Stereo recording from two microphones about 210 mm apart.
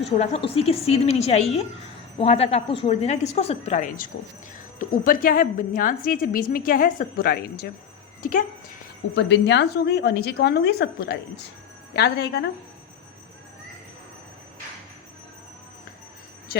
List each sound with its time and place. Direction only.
0.0 s a woman's voice: 30° left (ahead or behind)
9.1 s a woman's voice: 55° left (ahead or behind)